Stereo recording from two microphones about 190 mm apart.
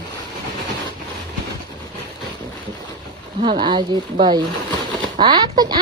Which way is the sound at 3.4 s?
25° right (ahead or behind).